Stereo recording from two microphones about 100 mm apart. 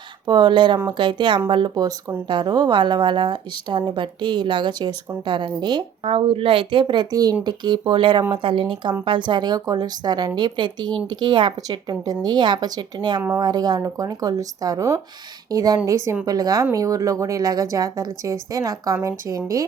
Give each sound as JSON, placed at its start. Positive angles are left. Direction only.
{"t": 0.3, "sound": "a woman's voice", "side_deg": -50}
{"t": 2.2, "sound": "a woman's voice", "side_deg": -50}
{"t": 6.1, "sound": "a woman's voice", "side_deg": -70}
{"t": 7.1, "sound": "a woman's voice", "side_deg": -35}
{"t": 7.4, "sound": "a woman's voice", "side_deg": -50}